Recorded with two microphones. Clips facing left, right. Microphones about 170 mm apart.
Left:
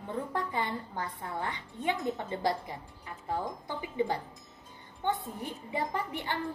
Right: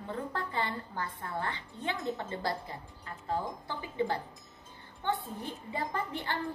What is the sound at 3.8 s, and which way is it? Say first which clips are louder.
Speech: left 1 dB; 15° left (ahead or behind).